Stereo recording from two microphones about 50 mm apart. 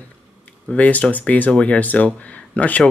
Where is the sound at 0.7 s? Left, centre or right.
Left.